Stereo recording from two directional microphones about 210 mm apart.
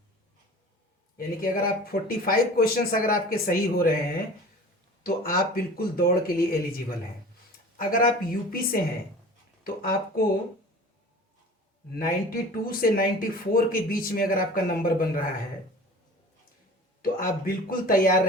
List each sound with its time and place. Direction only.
1.1 s speech: 45° left (ahead or behind)
5.0 s speech: 45° left (ahead or behind)
11.9 s speech: 45° left (ahead or behind)
17.0 s speech: 45° left (ahead or behind)